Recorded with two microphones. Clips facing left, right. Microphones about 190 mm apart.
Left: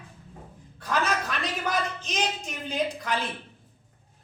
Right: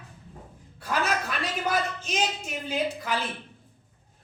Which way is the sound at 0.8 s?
10° right (ahead or behind).